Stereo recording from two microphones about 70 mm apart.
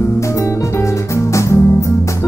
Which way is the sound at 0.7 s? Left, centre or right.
Left.